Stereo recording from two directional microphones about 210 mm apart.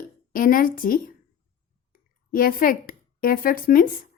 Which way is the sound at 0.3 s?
40° left (ahead or behind).